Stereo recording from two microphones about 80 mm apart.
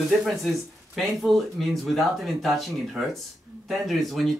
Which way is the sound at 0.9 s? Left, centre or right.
Centre.